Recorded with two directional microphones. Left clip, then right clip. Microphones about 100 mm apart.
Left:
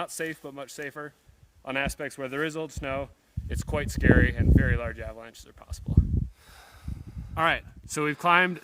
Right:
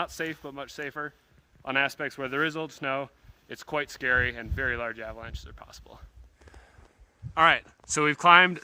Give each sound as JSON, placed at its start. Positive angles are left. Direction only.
{"t": 0.0, "sound": "speech", "side_deg": 50}
{"t": 7.3, "sound": "speech", "side_deg": 45}